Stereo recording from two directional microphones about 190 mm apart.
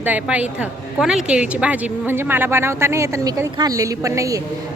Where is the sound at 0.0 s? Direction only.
10° right (ahead or behind).